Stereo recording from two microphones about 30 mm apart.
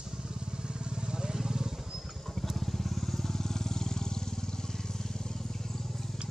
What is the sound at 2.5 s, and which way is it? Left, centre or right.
Vehicle, centre.